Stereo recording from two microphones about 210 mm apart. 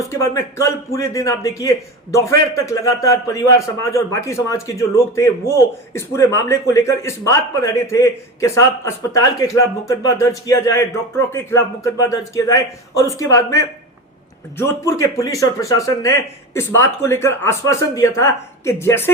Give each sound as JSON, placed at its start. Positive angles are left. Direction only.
{"t": 0.1, "sound": "a man's voice", "side_deg": 15}
{"t": 16.6, "sound": "a man's voice", "side_deg": 15}